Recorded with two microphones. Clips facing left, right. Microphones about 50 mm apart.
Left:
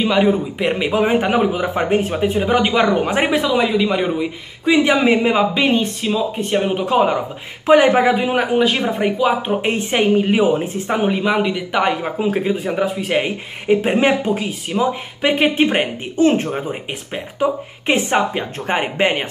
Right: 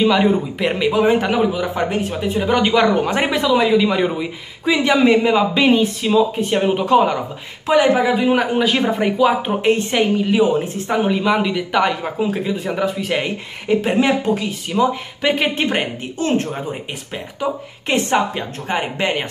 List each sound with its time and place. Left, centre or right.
0.0 s speech: centre
0.7 s speech: centre
2.3 s speech: centre
5.5 s speech: centre
7.6 s speech: left
8.3 s speech: centre
10.1 s speech: left
10.6 s speech: centre
12.2 s speech: left
12.6 s speech: centre
13.1 s speech: centre